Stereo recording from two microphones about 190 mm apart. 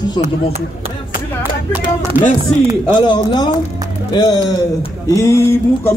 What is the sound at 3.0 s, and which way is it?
Speech, 20° left (ahead or behind).